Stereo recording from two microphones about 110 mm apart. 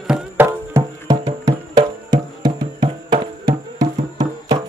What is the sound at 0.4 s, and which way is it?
Music, 25° right (ahead or behind).